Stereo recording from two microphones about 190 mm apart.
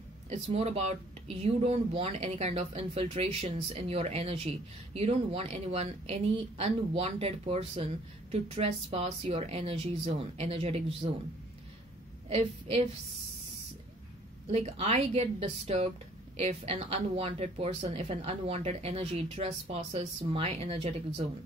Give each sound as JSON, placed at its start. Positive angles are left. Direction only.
{"t": 0.3, "sound": "speech", "side_deg": -35}
{"t": 12.3, "sound": "speech", "side_deg": -35}
{"t": 14.5, "sound": "speech", "side_deg": -35}